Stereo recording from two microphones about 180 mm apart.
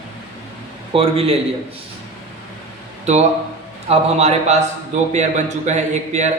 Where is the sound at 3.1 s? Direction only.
40° right (ahead or behind).